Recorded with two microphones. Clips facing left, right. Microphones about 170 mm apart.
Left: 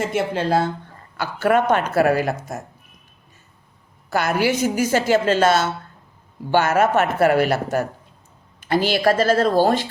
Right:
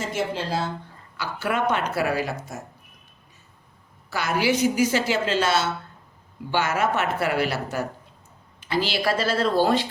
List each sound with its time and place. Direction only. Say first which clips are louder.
0.1 s a woman's voice: left 6 dB; 55° left (ahead or behind)
4.1 s a woman's voice: left 3 dB; 50° left (ahead or behind)